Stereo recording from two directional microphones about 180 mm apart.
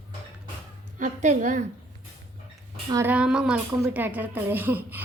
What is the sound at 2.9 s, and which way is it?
A woman's voice, 10° right (ahead or behind).